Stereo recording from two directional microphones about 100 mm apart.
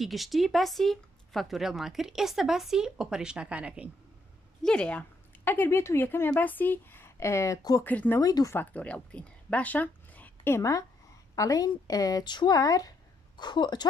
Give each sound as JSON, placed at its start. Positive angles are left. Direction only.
{"t": 0.0, "sound": "speech", "side_deg": 0}
{"t": 4.6, "sound": "speech", "side_deg": 10}
{"t": 7.8, "sound": "speech", "side_deg": 15}
{"t": 8.2, "sound": "speech", "side_deg": 35}
{"t": 8.5, "sound": "speech", "side_deg": 15}